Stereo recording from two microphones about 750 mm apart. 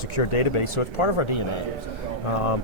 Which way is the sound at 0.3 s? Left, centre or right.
Left.